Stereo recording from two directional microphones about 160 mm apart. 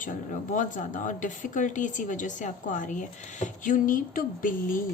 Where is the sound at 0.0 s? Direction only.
55° left (ahead or behind).